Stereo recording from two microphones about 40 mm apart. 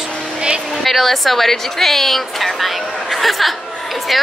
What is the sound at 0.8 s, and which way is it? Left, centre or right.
A woman's voice, centre.